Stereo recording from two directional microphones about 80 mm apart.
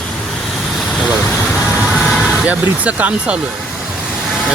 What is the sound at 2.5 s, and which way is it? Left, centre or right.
Speech, centre.